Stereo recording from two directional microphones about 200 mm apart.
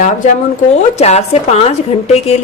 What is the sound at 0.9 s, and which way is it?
Speech, 35° left (ahead or behind).